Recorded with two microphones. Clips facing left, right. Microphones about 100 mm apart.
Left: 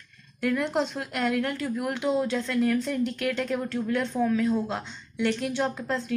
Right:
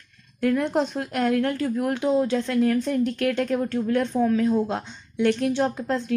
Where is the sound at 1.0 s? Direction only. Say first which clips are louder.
Right 4 dB; 35° right (ahead or behind).